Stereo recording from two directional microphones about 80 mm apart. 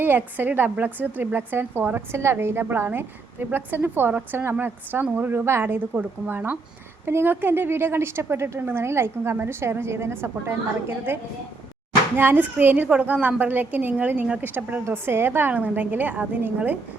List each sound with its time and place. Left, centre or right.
0.0 s a woman's voice: right